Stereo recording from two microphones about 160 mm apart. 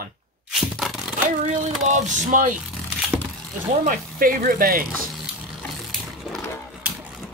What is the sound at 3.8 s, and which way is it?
Speech, 60° right (ahead or behind).